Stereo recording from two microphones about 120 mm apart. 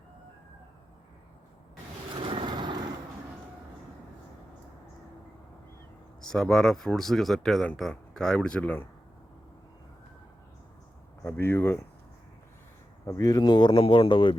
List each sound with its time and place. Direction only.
2.1 s vehicle: 45° right (ahead or behind)
6.2 s speech: 5° left (ahead or behind)
11.2 s speech: 20° left (ahead or behind)
13.1 s speech: 30° left (ahead or behind); by 14.3 s 45° left (ahead or behind)